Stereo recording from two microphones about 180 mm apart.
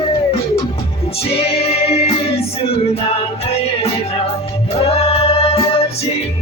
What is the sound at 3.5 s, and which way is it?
Music, 35° left (ahead or behind).